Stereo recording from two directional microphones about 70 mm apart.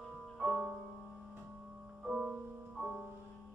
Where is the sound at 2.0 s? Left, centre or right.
Centre.